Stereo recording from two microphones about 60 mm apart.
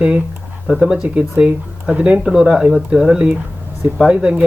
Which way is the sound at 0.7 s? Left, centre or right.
Centre.